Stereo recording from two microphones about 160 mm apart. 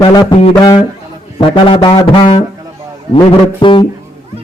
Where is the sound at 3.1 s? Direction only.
30° left (ahead or behind).